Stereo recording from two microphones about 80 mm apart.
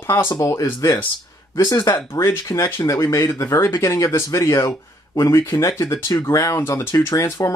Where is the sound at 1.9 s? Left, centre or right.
Left.